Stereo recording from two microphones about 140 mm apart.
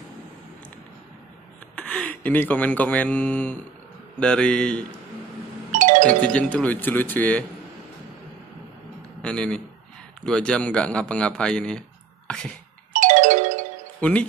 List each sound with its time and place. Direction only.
1.8 s speech: 5° left (ahead or behind)
5.7 s music: 65° right (ahead or behind)
6.0 s speech: 10° left (ahead or behind)
9.2 s speech: 5° left (ahead or behind)
12.9 s music: 65° right (ahead or behind)